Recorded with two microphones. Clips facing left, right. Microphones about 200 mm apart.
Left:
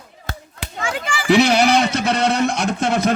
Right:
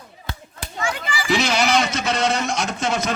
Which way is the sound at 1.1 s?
60° left (ahead or behind).